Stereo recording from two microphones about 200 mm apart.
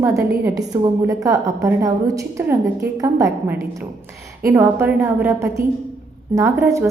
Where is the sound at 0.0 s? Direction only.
15° right (ahead or behind).